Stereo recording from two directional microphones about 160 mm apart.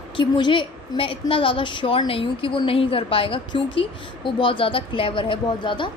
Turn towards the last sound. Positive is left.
turn(degrees=30)  # may be behind; listen again after turning